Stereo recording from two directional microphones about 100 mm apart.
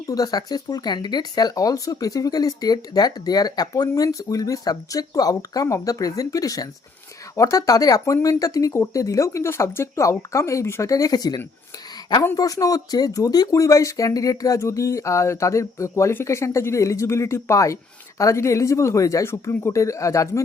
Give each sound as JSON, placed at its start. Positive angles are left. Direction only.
{"t": 0.1, "sound": "speech", "side_deg": 40}